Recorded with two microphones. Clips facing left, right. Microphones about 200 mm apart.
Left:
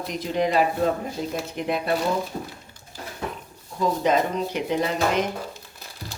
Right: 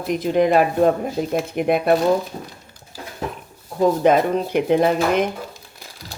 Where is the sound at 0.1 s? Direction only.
55° right (ahead or behind).